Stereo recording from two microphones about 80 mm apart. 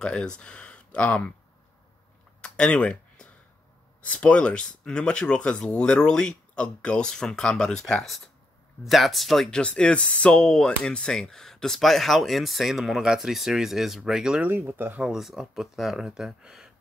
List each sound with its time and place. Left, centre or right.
0.0 s speech: centre
2.4 s a sound: centre
4.0 s speech: centre
9.6 s speech: centre
14.4 s speech: right
15.0 s speech: centre